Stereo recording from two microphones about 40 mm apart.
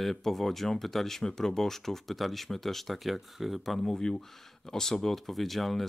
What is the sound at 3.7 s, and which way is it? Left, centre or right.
Speech, centre.